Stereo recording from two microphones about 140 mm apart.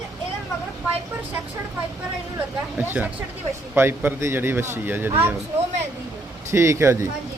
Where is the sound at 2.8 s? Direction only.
15° right (ahead or behind).